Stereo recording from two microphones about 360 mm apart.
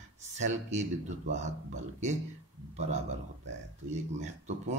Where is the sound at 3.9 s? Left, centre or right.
Centre.